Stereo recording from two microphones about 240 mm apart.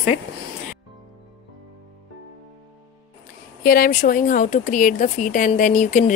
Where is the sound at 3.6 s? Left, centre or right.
Left.